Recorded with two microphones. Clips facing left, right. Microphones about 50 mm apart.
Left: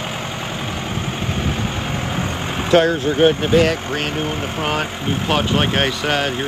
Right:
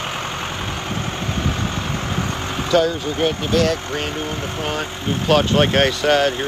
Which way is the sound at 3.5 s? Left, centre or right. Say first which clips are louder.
Left 3 dB; left.